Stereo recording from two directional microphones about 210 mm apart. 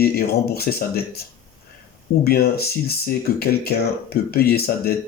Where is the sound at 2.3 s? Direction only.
45° left (ahead or behind).